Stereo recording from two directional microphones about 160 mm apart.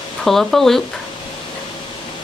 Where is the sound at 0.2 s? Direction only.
Centre (ahead or behind).